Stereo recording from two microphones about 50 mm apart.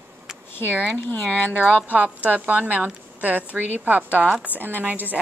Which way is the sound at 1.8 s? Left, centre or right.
Right.